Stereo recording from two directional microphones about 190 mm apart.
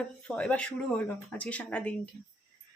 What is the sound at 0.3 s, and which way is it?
Speech, 5° left (ahead or behind).